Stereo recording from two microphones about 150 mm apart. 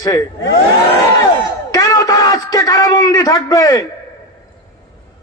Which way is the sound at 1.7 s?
25° left (ahead or behind).